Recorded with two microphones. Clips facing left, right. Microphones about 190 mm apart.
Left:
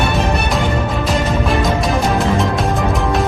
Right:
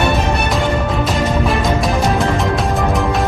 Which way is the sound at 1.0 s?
Centre (ahead or behind).